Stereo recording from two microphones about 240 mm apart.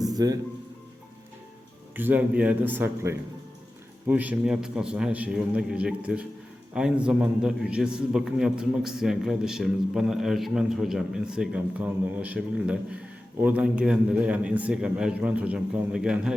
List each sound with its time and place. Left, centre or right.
0.1 s music: centre
2.0 s a man's voice: centre